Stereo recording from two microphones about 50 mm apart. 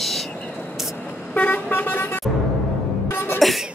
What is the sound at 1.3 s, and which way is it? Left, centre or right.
Vehicle, left.